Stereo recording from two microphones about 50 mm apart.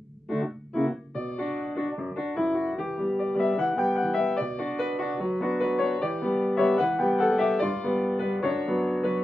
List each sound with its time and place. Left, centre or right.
0.3 s keyboard: centre
3.0 s music: centre
3.6 s music: centre
6.2 s music: left
6.5 s music: centre